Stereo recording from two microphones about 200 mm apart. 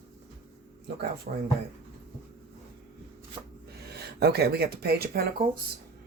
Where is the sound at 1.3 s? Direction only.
45° right (ahead or behind).